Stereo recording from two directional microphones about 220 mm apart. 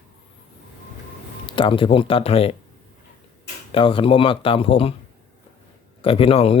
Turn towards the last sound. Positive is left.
turn(degrees=25)  # may be behind; listen again after turning